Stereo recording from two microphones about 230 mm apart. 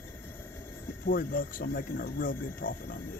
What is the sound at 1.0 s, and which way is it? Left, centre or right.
Speech, left.